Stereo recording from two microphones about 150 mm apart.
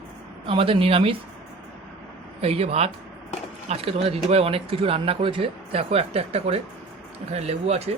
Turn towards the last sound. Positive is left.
turn(degrees=-45)  # may be behind; listen again after turning